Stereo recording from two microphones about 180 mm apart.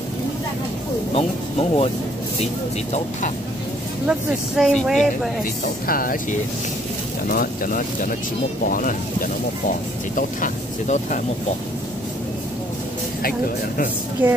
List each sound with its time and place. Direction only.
1.1 s speech: 35° left (ahead or behind)
4.6 s speech: centre (ahead or behind)
5.4 s speech: 50° left (ahead or behind)
7.2 s speech: 50° left (ahead or behind)
14.2 s a woman's voice: 10° right (ahead or behind)